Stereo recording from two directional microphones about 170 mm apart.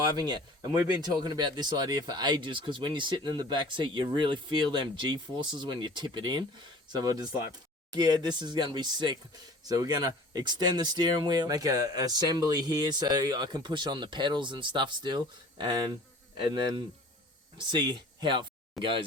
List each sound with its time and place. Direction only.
0.0 s speech: 25° right (ahead or behind)
17.7 s speech: 25° right (ahead or behind)